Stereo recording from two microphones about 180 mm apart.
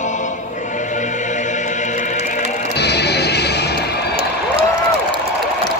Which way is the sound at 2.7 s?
65° left (ahead or behind).